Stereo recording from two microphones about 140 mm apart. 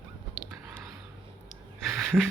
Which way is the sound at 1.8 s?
Centre (ahead or behind).